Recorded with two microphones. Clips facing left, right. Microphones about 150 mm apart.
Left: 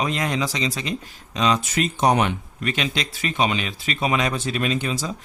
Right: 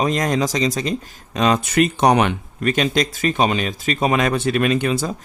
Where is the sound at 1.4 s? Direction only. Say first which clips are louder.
Right 5 dB; 50° right (ahead or behind); by 2.4 s 70° right (ahead or behind).